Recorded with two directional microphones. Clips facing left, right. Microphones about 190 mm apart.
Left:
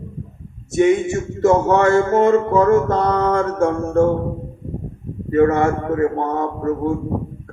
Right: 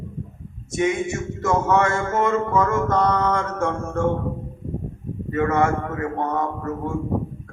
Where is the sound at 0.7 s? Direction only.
35° left (ahead or behind).